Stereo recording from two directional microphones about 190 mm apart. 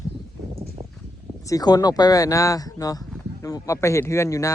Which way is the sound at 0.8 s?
30° right (ahead or behind).